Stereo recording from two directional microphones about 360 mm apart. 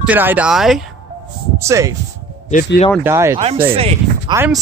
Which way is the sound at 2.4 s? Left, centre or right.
Left.